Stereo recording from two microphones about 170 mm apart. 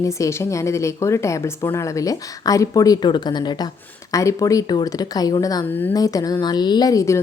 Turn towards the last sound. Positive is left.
turn(degrees=20)  # may be behind; listen again after turning